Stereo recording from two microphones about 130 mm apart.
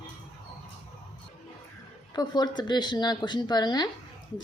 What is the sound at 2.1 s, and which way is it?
A woman's voice, 30° left (ahead or behind).